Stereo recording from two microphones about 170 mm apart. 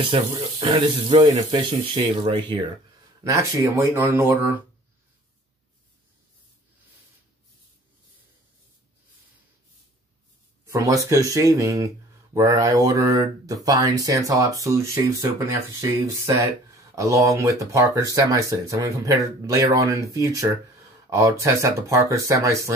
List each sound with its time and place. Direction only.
0.4 s speech: 30° right (ahead or behind)
3.3 s speech: 15° right (ahead or behind)
10.7 s speech: 20° right (ahead or behind)